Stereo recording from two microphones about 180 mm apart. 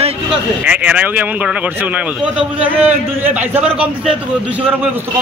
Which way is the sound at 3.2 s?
10° right (ahead or behind).